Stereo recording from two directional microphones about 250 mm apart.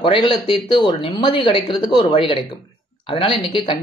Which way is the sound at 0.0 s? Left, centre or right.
Centre.